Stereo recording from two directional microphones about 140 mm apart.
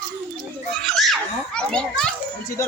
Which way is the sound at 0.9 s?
Centre (ahead or behind).